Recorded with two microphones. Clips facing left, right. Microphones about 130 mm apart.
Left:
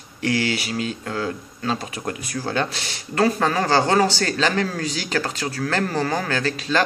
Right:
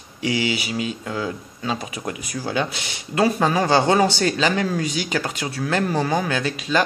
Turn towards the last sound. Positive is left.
turn(degrees=-15)  # may be behind; listen again after turning